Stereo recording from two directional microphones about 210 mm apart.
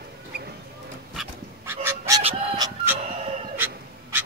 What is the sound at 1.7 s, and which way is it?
Fowl, 10° right (ahead or behind).